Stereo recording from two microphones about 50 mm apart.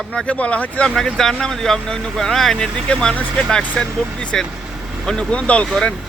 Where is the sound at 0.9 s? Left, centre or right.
Centre.